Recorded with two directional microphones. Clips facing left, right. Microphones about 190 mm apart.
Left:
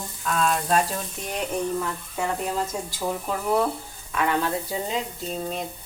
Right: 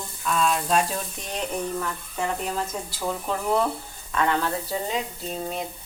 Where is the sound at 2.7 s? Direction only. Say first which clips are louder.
Left 1 dB; 10° left (ahead or behind).